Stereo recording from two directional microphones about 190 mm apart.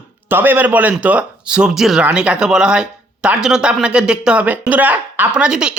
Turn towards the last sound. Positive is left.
turn(degrees=-5)  # may be behind; listen again after turning